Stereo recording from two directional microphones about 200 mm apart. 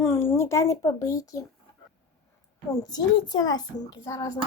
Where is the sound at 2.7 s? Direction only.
20° left (ahead or behind).